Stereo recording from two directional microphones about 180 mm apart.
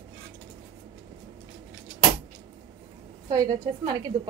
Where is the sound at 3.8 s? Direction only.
20° right (ahead or behind).